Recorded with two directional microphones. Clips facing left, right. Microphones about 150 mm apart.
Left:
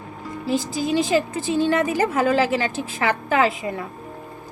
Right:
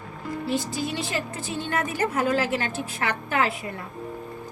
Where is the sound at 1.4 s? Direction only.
90° left.